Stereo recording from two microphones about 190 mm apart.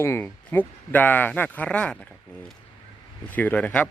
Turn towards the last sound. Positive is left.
turn(degrees=5)  # may be behind; listen again after turning